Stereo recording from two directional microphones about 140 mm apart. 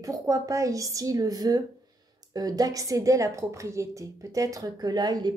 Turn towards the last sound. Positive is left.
turn(degrees=-30)  # may be behind; listen again after turning